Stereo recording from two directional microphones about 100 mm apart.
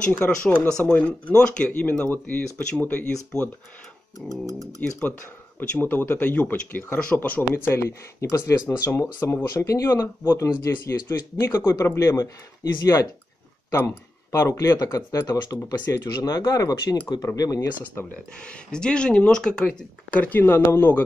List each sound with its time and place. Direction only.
0.0 s speech: 15° left (ahead or behind)
4.3 s speech: 35° left (ahead or behind)
5.6 s speech: 20° left (ahead or behind); by 17.6 s 35° left (ahead or behind)
18.4 s speech: 10° left (ahead or behind)